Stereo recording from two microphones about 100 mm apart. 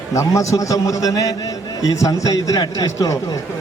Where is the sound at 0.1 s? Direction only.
35° left (ahead or behind).